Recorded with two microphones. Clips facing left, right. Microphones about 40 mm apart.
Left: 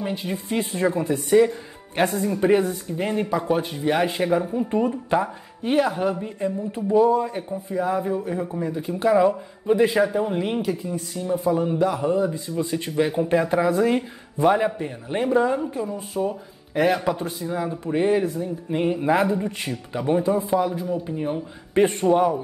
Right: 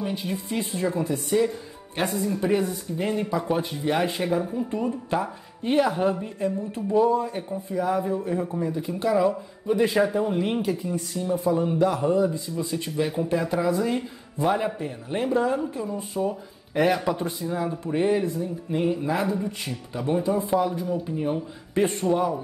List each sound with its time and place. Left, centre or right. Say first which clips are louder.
0.0 s speech: left 1 dB; centre
0.5 s speech: left 5 dB; left
2.0 s speech: left 4 dB; centre
5.9 s speech: even; centre
6.2 s speech: left 1 dB; centre
7.1 s a man's voice: left 3 dB; left
7.7 s speech: left 1 dB; centre; by 14.0 s left
14.8 s speech: left 2 dB; left
15.9 s speech: left 1 dB; centre
18.4 s speech: left 2 dB; left
19.0 s a man's voice: left 5 dB; left
20.0 s speech: left 3 dB; centre
20.4 s speech: left 1 dB; centre